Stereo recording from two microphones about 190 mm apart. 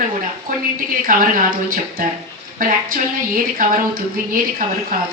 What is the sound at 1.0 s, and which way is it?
A woman's voice, 45° right (ahead or behind).